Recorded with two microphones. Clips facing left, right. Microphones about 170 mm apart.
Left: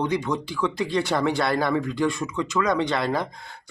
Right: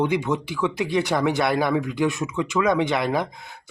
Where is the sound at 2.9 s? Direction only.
20° right (ahead or behind).